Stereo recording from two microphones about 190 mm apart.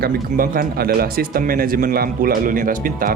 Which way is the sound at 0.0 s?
50° right (ahead or behind).